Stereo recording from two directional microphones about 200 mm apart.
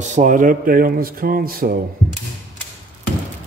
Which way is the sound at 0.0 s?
35° right (ahead or behind).